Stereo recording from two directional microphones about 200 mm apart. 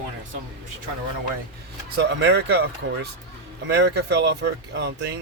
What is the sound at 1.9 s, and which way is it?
Speech, 60° right (ahead or behind).